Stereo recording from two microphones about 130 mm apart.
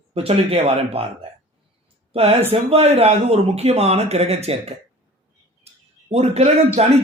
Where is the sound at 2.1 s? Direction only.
50° right (ahead or behind).